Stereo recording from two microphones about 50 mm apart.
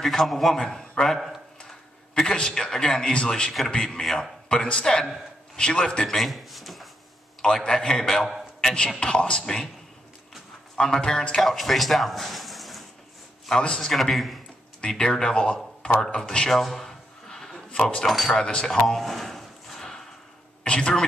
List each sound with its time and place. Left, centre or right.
0.0 s a man's voice: centre
0.7 s a man's voice: centre
2.1 s a man's voice: centre
4.0 s a man's voice: centre
4.5 s a man's voice: centre
7.4 s a man's voice: centre
10.8 s a man's voice: centre
11.4 s a man's voice: centre
13.5 s a man's voice: centre
14.1 s a man's voice: centre
14.9 s a man's voice: centre
16.5 s a sound: centre
18.4 s a sound: centre
20.6 s speech: centre